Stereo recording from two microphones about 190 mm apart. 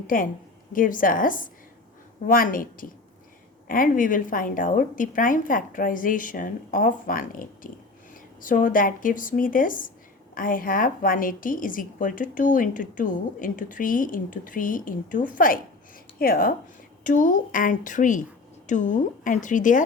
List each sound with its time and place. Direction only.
0.1 s a woman's voice: 45° left (ahead or behind)